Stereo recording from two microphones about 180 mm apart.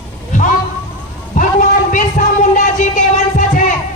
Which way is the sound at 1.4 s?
45° left (ahead or behind).